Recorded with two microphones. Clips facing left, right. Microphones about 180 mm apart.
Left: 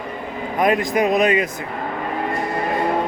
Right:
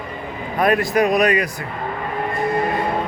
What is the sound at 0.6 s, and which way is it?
Speech, 20° left (ahead or behind).